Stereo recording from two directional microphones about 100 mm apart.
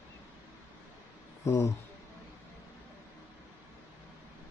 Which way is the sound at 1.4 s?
35° left (ahead or behind).